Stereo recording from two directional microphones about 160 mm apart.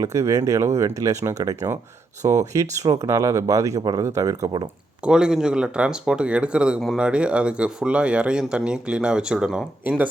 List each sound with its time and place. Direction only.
0.0 s speech: 20° right (ahead or behind)
5.0 s speech: 5° right (ahead or behind)